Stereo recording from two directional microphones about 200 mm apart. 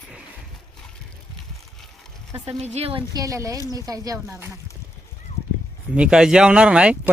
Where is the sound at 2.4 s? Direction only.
30° right (ahead or behind); by 4.5 s 15° right (ahead or behind).